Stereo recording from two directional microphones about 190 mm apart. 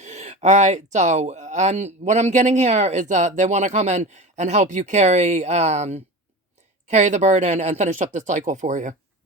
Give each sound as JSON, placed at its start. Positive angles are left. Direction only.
{"t": 0.0, "sound": "speech", "side_deg": -35}